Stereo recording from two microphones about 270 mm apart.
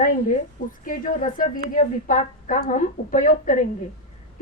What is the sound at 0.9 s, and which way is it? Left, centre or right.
A woman's voice, left.